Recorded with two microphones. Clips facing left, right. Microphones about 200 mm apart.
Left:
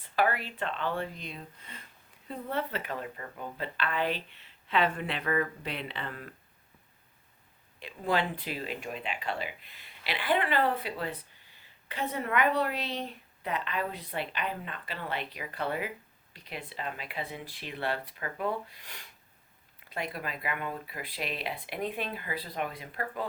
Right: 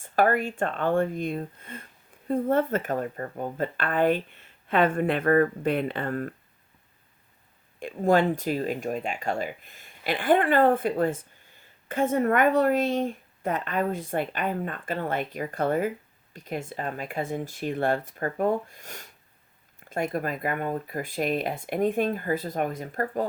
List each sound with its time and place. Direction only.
0.0 s speech: 45° right (ahead or behind)
7.8 s speech: 45° right (ahead or behind)